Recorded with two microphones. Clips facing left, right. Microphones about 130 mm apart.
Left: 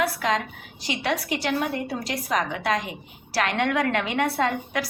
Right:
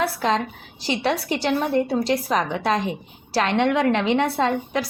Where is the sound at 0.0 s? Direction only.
30° right (ahead or behind).